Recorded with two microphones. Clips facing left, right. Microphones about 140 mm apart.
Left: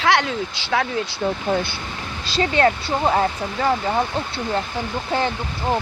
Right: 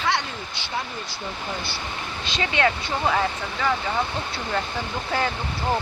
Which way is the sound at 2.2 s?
35° left (ahead or behind).